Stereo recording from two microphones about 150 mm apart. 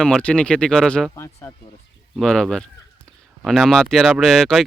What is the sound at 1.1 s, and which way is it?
Speech, 20° left (ahead or behind).